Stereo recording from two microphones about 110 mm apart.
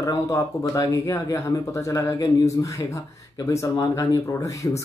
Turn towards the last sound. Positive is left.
turn(degrees=30)  # may be behind; listen again after turning